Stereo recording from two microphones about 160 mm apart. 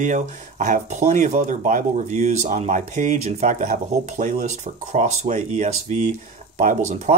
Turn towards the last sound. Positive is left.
turn(degrees=-50)  # may be behind; listen again after turning